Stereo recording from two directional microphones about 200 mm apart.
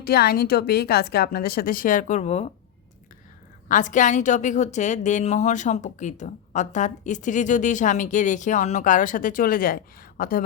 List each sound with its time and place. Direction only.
0.0 s a woman's voice: 50° left (ahead or behind); by 2.5 s 30° left (ahead or behind)
3.7 s a woman's voice: 40° left (ahead or behind)